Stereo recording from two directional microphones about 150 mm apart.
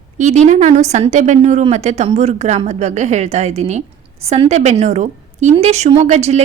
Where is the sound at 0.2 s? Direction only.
50° right (ahead or behind).